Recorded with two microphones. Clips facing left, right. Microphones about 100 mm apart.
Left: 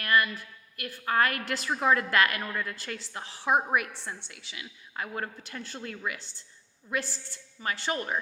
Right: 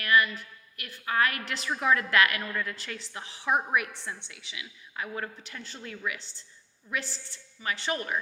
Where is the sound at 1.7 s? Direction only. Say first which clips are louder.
Left 1 dB; 30° left (ahead or behind); by 5.9 s 50° left (ahead or behind).